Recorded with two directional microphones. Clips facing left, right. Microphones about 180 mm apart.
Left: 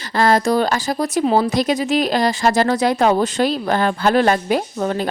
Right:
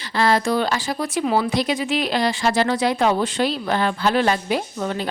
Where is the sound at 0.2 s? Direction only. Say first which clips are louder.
Left 3 dB; 45° left (ahead or behind).